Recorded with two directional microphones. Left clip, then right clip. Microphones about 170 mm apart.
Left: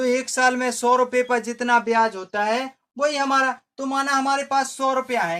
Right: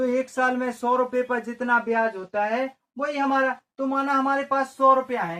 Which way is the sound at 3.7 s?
25° left (ahead or behind).